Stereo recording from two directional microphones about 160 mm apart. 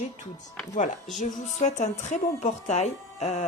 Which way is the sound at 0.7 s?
50° left (ahead or behind).